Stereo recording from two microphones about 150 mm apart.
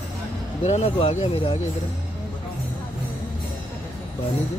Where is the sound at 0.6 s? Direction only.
45° left (ahead or behind).